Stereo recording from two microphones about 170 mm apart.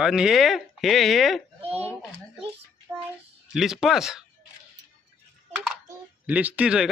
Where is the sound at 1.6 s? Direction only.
35° right (ahead or behind).